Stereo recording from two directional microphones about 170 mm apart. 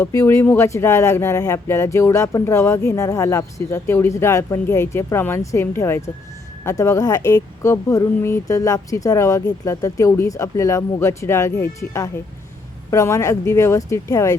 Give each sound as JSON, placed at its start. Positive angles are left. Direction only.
{"t": 0.0, "sound": "speech", "side_deg": 15}